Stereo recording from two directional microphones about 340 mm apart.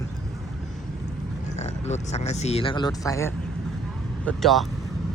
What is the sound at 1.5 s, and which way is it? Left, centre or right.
Speech, centre.